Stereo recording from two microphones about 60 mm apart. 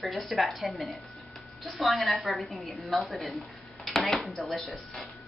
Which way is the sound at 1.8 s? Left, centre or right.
Centre.